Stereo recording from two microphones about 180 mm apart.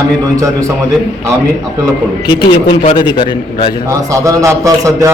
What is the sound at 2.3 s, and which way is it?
A man's voice, 25° left (ahead or behind).